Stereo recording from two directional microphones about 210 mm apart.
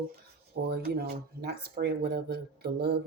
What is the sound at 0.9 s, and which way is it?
Speech, 50° right (ahead or behind).